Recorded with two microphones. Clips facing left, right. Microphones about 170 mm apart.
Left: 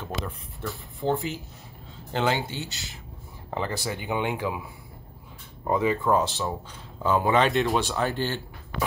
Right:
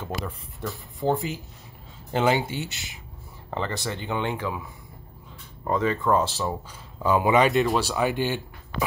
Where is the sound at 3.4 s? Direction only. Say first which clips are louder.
Even; 5° left (ahead or behind).